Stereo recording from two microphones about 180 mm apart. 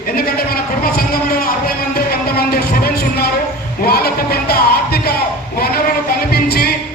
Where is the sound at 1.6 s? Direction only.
60° left (ahead or behind).